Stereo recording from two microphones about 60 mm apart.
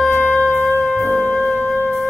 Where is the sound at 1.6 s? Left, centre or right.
Left.